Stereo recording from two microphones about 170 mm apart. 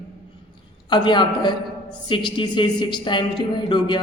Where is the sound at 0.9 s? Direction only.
25° left (ahead or behind).